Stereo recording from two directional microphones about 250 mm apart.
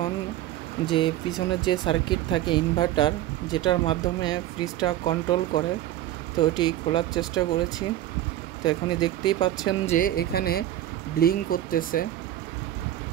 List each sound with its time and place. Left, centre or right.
0.8 s speech: centre
8.6 s speech: centre
9.9 s speech: left